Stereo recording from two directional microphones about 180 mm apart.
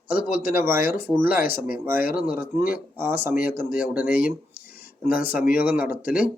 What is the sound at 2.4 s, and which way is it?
Speech, 10° right (ahead or behind).